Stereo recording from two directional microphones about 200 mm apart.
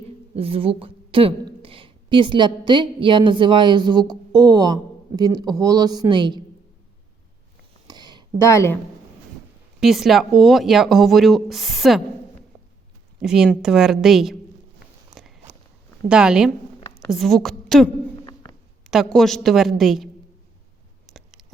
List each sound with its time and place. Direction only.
0.3 s a woman's voice: 30° right (ahead or behind)
7.9 s a sound: 20° right (ahead or behind)
8.4 s speech: 15° left (ahead or behind)
9.8 s speech: centre (ahead or behind)
13.2 s speech: 5° right (ahead or behind)
16.0 s speech: 5° right (ahead or behind)
18.2 s a sound: 20° left (ahead or behind)
18.9 s speech: centre (ahead or behind)
21.1 s a sound: centre (ahead or behind)